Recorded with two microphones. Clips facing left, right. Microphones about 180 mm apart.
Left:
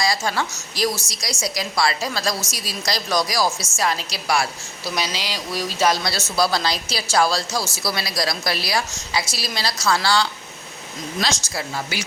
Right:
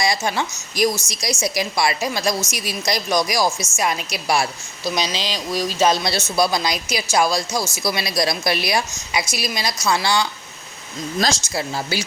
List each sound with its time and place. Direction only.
0.0 s a woman's voice: 20° right (ahead or behind)
11.2 s speech: 40° right (ahead or behind)
11.5 s speech: 30° right (ahead or behind)